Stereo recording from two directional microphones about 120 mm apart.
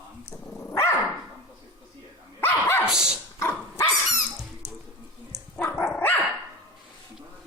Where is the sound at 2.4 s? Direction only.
20° left (ahead or behind).